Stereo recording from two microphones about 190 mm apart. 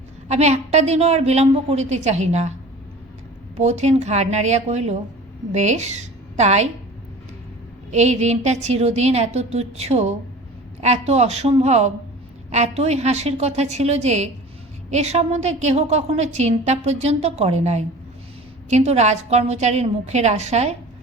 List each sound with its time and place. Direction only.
0.3 s a woman's voice: 35° right (ahead or behind)
3.6 s a woman's voice: 35° right (ahead or behind)
7.9 s a woman's voice: 35° right (ahead or behind)